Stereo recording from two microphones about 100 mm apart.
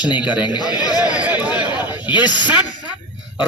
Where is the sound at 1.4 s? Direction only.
45° left (ahead or behind).